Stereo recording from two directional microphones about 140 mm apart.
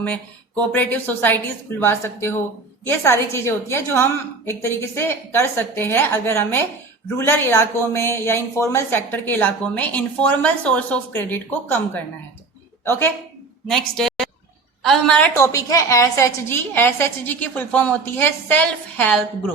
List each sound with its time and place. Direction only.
0.0 s speech: 10° left (ahead or behind)
13.7 s a woman's voice: 5° left (ahead or behind)
15.4 s speech: 25° left (ahead or behind)